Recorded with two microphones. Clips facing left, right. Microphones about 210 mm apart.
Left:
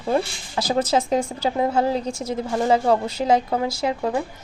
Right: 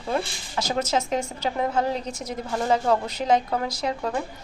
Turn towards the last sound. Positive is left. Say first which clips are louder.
# left 4 dB
turn(degrees=25)  # may be behind; listen again after turning